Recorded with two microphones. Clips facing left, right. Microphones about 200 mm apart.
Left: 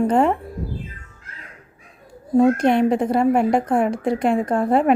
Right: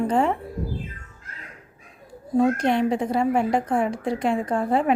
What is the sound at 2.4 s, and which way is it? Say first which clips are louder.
A woman's voice: left 5 dB; 55° left (ahead or behind).